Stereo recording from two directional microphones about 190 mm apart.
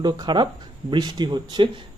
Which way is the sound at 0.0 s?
20° right (ahead or behind).